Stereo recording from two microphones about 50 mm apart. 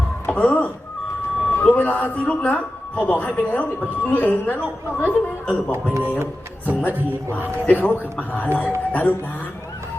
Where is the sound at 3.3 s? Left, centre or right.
Left.